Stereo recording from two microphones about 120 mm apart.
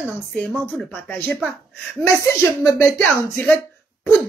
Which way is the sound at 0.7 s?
10° left (ahead or behind).